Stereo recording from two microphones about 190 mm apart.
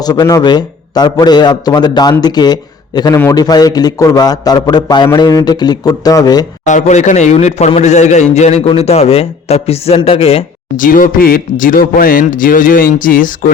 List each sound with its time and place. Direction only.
0.0 s a man's voice: 20° left (ahead or behind)
6.7 s a man's voice: 40° left (ahead or behind)
10.8 s speech: 45° left (ahead or behind)